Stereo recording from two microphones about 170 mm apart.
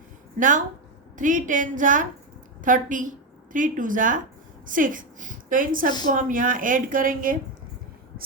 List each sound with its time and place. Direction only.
0.3 s a woman's voice: 50° right (ahead or behind)